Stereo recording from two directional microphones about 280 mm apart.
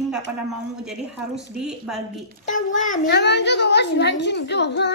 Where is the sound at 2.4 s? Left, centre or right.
Left.